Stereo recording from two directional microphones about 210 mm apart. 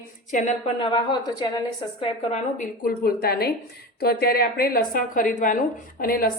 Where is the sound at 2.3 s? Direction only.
40° left (ahead or behind).